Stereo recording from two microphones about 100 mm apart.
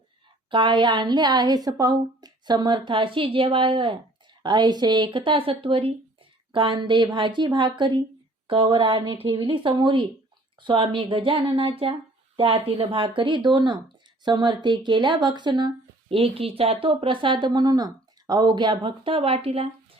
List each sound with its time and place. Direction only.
0.5 s a woman's voice: 55° right (ahead or behind)
6.5 s a woman's voice: 55° right (ahead or behind)
16.0 s speech: 70° right (ahead or behind)